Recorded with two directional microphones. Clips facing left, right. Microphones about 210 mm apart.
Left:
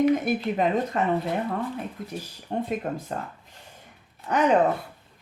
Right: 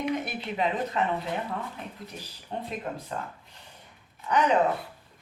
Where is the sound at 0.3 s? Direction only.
45° left (ahead or behind).